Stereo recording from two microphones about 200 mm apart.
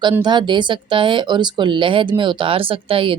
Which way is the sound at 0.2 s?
20° right (ahead or behind).